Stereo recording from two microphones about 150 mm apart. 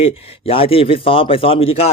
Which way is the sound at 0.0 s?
40° left (ahead or behind).